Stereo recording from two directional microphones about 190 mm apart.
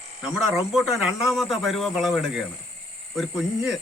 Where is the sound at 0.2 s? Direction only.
30° left (ahead or behind).